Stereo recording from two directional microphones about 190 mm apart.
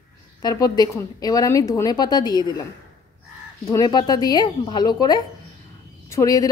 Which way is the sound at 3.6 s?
20° left (ahead or behind).